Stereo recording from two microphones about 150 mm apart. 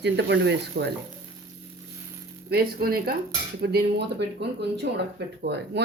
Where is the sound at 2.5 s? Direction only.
90° right.